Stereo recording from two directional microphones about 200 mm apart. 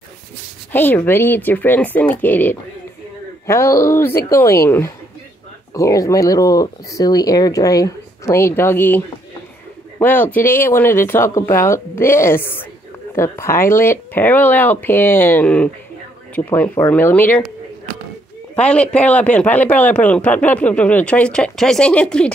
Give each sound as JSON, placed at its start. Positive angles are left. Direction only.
{"t": 0.7, "sound": "speech", "side_deg": 10}
{"t": 18.7, "sound": "speech", "side_deg": 5}